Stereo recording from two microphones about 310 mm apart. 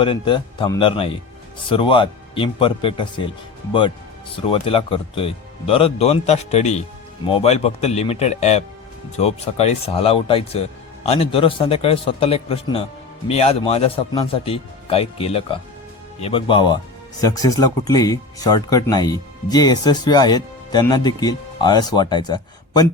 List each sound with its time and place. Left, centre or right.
0.0 s speech: centre